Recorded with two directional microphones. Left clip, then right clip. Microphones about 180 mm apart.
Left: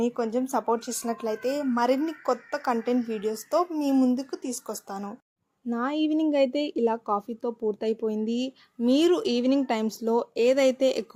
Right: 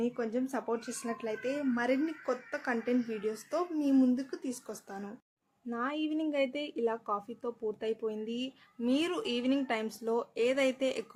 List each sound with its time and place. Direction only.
0.0 s speech: 30° left (ahead or behind)